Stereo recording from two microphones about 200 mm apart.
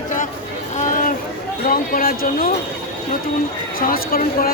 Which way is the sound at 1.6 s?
45° left (ahead or behind).